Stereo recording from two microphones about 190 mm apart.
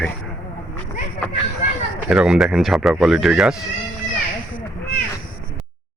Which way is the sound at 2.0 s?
5° right (ahead or behind).